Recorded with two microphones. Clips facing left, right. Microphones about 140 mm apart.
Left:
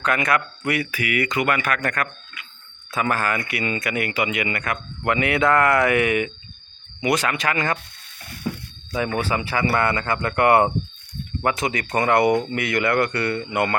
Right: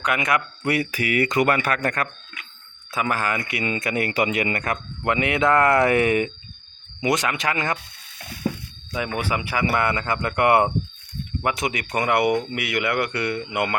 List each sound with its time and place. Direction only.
0.0 s speech: 15° right (ahead or behind)
0.6 s a man's voice: 35° right (ahead or behind)
2.9 s speech: 15° right (ahead or behind); by 4.8 s 35° right (ahead or behind)
5.0 s speech: 20° right (ahead or behind)
7.0 s speech: 20° right (ahead or behind)
9.2 s speech: 15° right (ahead or behind)